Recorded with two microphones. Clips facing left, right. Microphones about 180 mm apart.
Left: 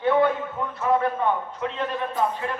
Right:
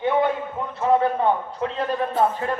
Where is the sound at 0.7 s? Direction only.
35° right (ahead or behind).